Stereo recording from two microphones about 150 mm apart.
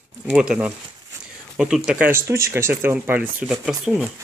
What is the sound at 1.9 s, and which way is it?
Speech, 10° right (ahead or behind).